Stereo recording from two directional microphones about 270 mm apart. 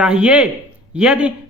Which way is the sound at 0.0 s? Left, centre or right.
Centre.